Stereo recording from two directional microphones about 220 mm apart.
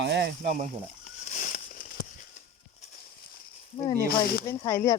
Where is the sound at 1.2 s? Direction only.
35° left (ahead or behind).